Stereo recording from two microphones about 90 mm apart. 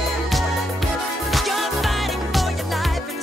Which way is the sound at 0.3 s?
Centre (ahead or behind).